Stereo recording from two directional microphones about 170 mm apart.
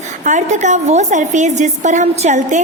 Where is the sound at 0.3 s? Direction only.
45° right (ahead or behind).